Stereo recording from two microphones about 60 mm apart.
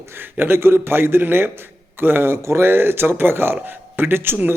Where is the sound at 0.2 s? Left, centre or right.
Right.